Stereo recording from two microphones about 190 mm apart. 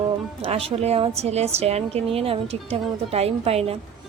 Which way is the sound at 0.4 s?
30° right (ahead or behind).